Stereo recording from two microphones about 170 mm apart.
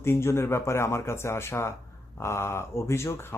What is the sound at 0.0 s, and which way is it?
Speech, 15° left (ahead or behind).